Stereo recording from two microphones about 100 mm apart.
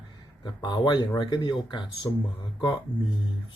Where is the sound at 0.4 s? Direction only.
45° left (ahead or behind).